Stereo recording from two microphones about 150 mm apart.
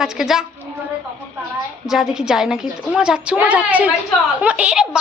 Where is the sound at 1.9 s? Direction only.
5° right (ahead or behind).